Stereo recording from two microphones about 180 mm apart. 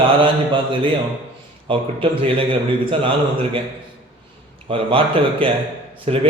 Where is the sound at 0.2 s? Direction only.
30° right (ahead or behind).